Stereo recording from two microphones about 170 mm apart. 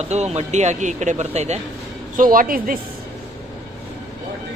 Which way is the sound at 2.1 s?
55° right (ahead or behind).